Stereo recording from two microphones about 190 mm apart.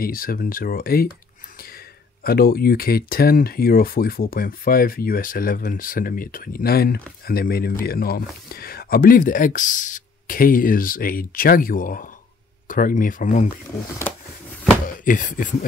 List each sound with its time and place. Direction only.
0.0 s speech: 50° left (ahead or behind)
2.2 s speech: 55° left (ahead or behind)
15.0 s speech: 45° left (ahead or behind)